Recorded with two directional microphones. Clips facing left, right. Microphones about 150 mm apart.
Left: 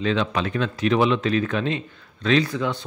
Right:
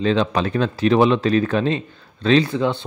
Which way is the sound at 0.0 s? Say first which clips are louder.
Right 4 dB; 35° right (ahead or behind).